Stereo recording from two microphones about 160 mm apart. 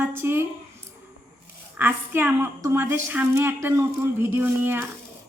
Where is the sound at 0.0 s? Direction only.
15° right (ahead or behind).